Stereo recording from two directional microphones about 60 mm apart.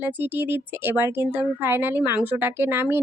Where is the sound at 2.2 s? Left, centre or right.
Right.